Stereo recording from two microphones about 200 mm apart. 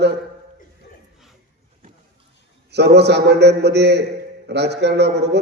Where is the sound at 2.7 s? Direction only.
55° right (ahead or behind).